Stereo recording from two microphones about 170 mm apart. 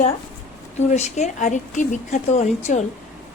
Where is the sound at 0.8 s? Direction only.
45° left (ahead or behind).